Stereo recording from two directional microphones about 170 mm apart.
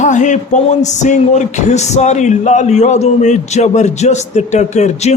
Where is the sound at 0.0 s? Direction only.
45° left (ahead or behind).